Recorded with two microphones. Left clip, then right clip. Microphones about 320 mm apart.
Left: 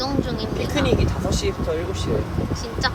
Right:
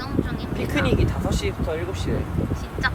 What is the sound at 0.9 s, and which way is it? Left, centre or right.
Speech, right.